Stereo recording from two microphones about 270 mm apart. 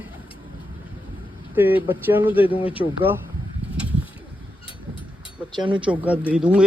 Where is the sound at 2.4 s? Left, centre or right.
Centre.